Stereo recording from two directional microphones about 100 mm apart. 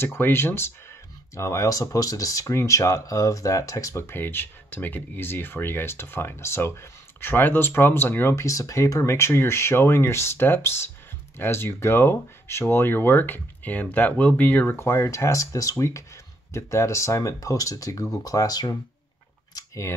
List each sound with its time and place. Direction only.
0.0 s speech: 20° left (ahead or behind); by 18.8 s 40° left (ahead or behind)
19.5 s camera: 30° left (ahead or behind)